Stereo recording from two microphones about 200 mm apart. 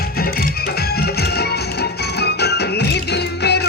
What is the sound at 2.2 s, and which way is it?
Music, 55° left (ahead or behind).